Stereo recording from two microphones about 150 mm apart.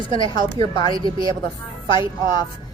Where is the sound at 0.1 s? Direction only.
30° left (ahead or behind).